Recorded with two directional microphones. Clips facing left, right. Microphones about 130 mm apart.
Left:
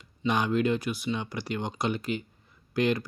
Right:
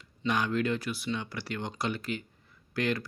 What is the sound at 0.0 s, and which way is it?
Speech, 20° left (ahead or behind).